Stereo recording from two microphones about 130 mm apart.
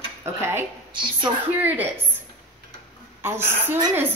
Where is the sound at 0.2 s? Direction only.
20° right (ahead or behind).